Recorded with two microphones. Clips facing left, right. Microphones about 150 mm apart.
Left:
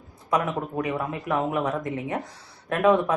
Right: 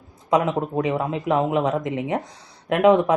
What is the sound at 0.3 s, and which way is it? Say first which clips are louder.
Speech: right 5 dB; 20° right (ahead or behind).